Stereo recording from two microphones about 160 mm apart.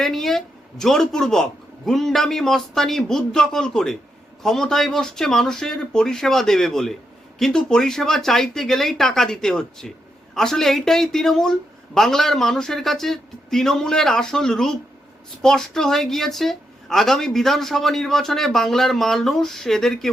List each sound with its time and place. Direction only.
0.0 s speech: centre (ahead or behind)